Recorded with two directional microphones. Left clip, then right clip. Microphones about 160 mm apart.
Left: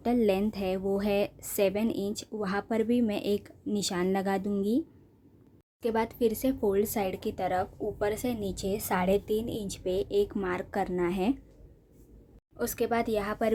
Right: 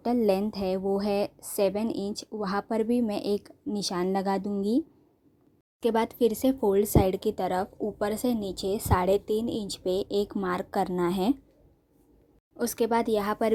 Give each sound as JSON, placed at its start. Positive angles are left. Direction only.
{"t": 0.0, "sound": "a woman's voice", "side_deg": -20}
{"t": 5.8, "sound": "speech", "side_deg": -40}
{"t": 12.5, "sound": "a woman's voice", "side_deg": -30}